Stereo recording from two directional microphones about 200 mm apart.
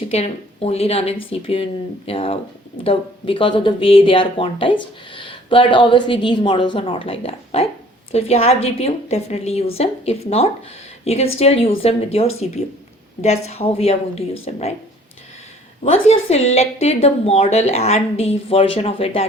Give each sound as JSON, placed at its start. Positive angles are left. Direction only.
{"t": 0.1, "sound": "a woman's voice", "side_deg": 30}
{"t": 15.8, "sound": "a woman's voice", "side_deg": 30}